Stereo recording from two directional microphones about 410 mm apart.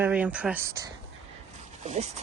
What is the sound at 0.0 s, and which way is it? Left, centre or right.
Speech, centre.